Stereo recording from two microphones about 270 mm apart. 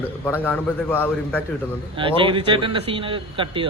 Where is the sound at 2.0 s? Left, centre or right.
Centre.